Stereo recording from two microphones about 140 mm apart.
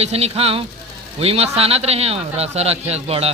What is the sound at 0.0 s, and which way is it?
A man's voice, 45° right (ahead or behind).